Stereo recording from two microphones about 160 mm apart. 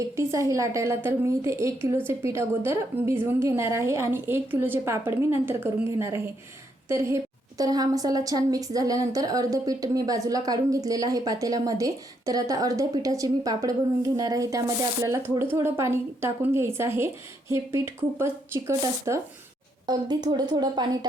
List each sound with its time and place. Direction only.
0.2 s a woman's voice: 20° right (ahead or behind)